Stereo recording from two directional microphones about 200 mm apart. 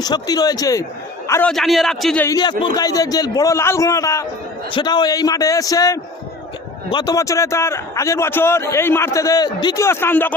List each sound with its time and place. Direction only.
0.0 s a man's voice: 20° left (ahead or behind)
1.3 s a man's voice: 5° left (ahead or behind)
2.2 s a man's voice: 20° left (ahead or behind)